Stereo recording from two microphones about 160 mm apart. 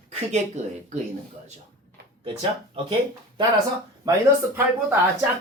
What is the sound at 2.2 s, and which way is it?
Speech, 35° right (ahead or behind).